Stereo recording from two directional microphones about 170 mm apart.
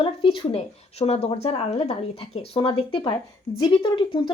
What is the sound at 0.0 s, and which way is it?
Speech, 30° left (ahead or behind).